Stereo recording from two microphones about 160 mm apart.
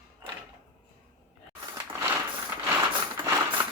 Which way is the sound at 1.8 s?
10° right (ahead or behind).